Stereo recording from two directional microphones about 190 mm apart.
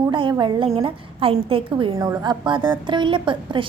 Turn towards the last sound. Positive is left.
turn(degrees=-25)  # may be behind; listen again after turning